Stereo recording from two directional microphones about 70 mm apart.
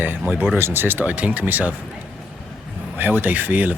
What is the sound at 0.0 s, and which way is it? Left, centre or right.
Speech, right.